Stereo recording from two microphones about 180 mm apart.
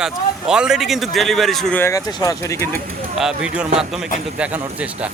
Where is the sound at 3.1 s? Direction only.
5° right (ahead or behind).